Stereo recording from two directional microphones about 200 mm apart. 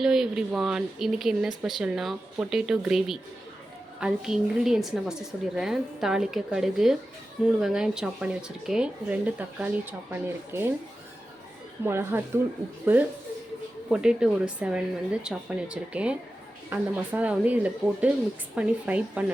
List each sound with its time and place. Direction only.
0.0 s a woman's voice: centre (ahead or behind)
11.9 s a woman's voice: 10° right (ahead or behind)